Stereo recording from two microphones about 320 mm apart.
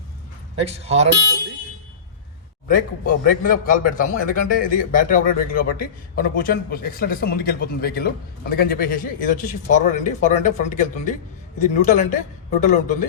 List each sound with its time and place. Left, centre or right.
0.6 s speech: centre
2.6 s speech: left